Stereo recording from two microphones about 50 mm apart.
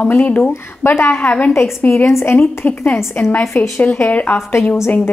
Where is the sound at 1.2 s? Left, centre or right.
Left.